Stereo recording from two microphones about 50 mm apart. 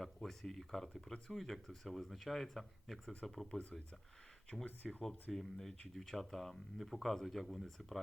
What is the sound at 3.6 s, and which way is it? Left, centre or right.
Speech, left.